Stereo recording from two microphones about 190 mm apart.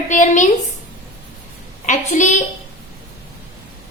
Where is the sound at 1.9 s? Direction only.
40° left (ahead or behind).